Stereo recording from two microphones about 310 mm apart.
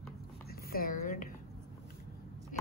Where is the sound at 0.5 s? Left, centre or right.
Left.